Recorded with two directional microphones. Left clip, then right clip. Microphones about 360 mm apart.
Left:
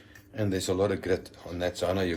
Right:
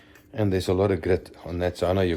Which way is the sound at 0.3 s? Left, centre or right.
Right.